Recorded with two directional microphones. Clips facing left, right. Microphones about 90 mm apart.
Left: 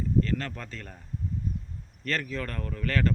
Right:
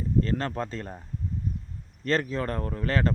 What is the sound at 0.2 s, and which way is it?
Speech, 35° right (ahead or behind).